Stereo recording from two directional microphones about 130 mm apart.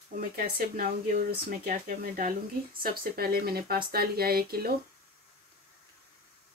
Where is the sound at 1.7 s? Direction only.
90° right.